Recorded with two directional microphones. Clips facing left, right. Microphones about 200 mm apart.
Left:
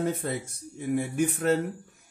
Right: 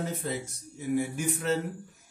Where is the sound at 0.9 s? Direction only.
55° left (ahead or behind).